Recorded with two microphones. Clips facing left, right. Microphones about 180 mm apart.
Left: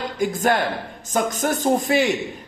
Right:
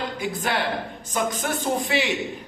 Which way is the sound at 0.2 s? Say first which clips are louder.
Left 8 dB; 45° left (ahead or behind).